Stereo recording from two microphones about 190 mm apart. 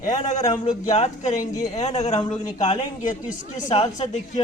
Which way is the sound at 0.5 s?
25° left (ahead or behind).